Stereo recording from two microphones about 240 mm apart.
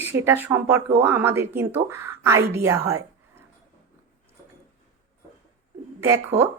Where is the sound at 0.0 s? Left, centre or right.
Centre.